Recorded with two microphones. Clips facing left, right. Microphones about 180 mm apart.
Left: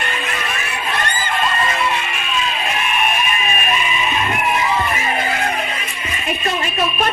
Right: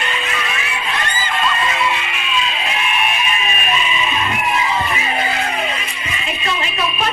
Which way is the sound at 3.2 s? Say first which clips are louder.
Left 1 dB; 50° left (ahead or behind).